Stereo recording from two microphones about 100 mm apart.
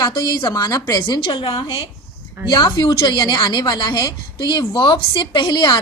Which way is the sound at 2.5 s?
45° left (ahead or behind).